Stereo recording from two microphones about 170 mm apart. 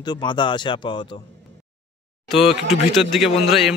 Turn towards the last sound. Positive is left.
turn(degrees=0)  # may be behind; listen again after turning